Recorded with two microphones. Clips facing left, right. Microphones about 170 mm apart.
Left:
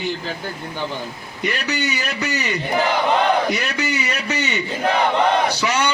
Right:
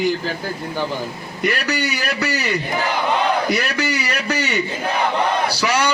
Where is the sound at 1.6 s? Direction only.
10° right (ahead or behind).